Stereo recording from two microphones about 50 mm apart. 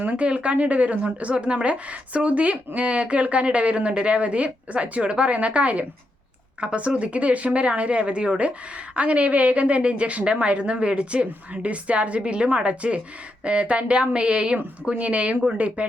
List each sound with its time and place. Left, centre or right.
0.0 s speech: right